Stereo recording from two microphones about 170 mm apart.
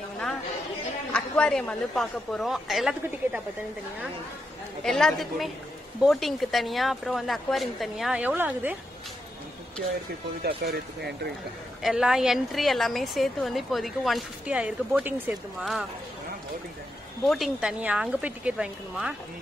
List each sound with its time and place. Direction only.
1.1 s a woman's voice: 5° left (ahead or behind)
4.8 s a woman's voice: centre (ahead or behind)
10.6 s speech: 70° right (ahead or behind)
11.8 s a woman's voice: 5° right (ahead or behind)
17.2 s a woman's voice: centre (ahead or behind)